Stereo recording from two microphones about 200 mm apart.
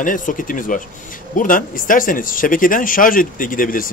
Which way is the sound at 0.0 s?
40° left (ahead or behind).